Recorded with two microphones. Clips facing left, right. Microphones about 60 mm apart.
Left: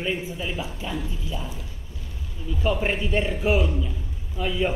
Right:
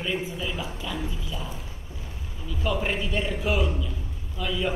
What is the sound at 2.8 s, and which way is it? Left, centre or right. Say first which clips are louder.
Speech: left 3 dB; left.